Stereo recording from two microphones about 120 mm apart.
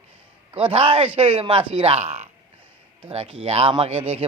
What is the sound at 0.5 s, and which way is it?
Speech, 45° right (ahead or behind).